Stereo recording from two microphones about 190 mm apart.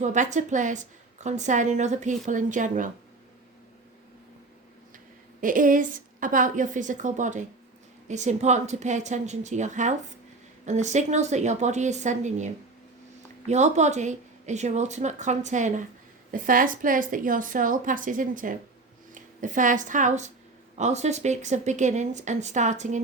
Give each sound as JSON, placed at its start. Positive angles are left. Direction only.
{"t": 0.0, "sound": "a woman's voice", "side_deg": -40}
{"t": 5.4, "sound": "a woman's voice", "side_deg": -45}
{"t": 13.5, "sound": "a woman's voice", "side_deg": -35}